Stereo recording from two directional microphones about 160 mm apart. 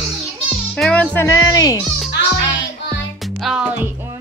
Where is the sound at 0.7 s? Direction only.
5° left (ahead or behind).